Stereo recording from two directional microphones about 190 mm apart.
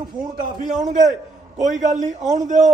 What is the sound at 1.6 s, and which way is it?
A man's voice, 40° right (ahead or behind).